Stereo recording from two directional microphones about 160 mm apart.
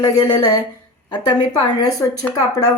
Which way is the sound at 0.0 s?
20° left (ahead or behind).